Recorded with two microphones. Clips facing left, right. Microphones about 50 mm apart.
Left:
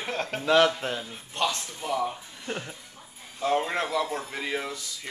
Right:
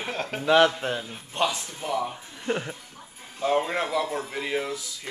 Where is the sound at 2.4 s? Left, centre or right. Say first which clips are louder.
Right 7 dB; right.